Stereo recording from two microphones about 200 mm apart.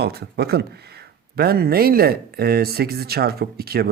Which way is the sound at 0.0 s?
55° right (ahead or behind).